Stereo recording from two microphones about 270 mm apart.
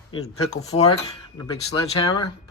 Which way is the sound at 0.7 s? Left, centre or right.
Centre.